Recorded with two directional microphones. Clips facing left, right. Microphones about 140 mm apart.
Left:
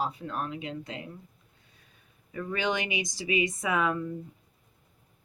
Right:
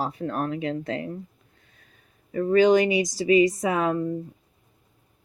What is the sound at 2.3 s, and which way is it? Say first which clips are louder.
Speech: right 13 dB; 40° right (ahead or behind).